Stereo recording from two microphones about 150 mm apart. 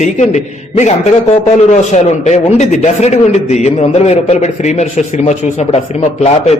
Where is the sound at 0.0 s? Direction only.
50° left (ahead or behind).